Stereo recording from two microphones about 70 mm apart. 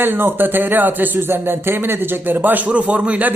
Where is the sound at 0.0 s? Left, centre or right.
Right.